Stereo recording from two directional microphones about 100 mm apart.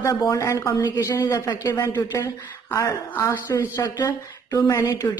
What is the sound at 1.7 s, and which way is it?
A woman's voice, 25° left (ahead or behind).